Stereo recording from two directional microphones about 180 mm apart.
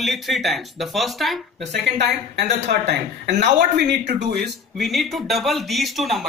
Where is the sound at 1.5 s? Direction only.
70° right (ahead or behind).